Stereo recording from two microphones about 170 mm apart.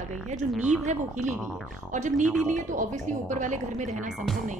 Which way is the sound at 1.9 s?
45° right (ahead or behind).